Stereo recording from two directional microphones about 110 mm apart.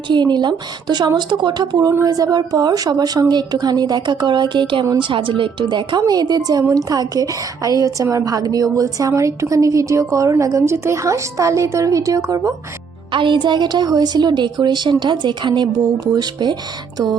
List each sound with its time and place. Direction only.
0.1 s a woman's voice: 40° right (ahead or behind)
1.9 s a woman's voice: 30° right (ahead or behind)
13.1 s a woman's voice: 50° right (ahead or behind)